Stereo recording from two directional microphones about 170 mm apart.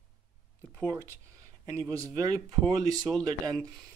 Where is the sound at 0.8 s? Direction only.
15° right (ahead or behind).